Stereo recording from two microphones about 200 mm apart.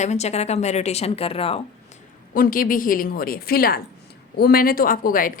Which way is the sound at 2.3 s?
45° left (ahead or behind).